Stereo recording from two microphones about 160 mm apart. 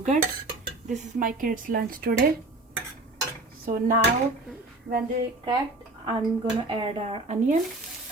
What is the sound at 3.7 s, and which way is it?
Speech, 65° right (ahead or behind).